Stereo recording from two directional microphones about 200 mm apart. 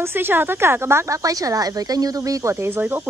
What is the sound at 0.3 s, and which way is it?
Speech, 10° right (ahead or behind).